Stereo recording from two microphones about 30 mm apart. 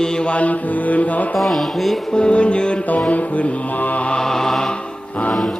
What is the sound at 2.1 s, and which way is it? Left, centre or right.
Music, left.